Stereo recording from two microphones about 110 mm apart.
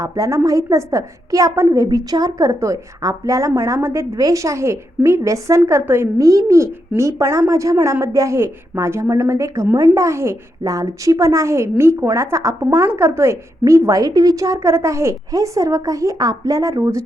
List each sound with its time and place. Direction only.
0.0 s a woman's voice: 30° right (ahead or behind)